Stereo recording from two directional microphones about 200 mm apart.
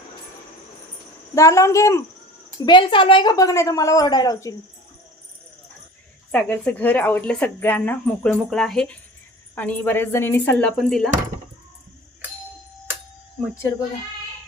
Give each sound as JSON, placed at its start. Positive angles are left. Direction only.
{"t": 1.4, "sound": "a woman's voice", "side_deg": 15}
{"t": 6.3, "sound": "a woman's voice", "side_deg": 10}